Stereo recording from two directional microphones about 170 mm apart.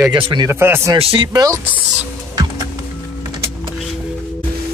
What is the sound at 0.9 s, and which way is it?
Speech, 30° right (ahead or behind).